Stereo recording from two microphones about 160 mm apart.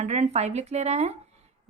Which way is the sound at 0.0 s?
45° right (ahead or behind).